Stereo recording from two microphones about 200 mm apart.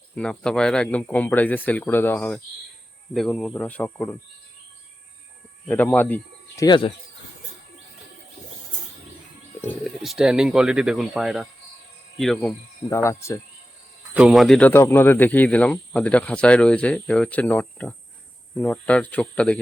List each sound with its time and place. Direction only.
0.2 s speech: 5° left (ahead or behind)
5.6 s speech: 10° left (ahead or behind)
6.7 s speech: 25° left (ahead or behind)
9.6 s speech: 5° left (ahead or behind)
12.1 s cricket: centre (ahead or behind)
12.9 s speech: 15° left (ahead or behind)
14.1 s speech: 5° right (ahead or behind)